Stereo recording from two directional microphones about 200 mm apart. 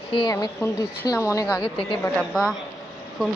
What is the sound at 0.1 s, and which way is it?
Speech, 20° left (ahead or behind).